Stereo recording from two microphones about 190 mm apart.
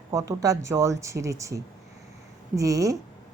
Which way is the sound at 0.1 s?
15° right (ahead or behind).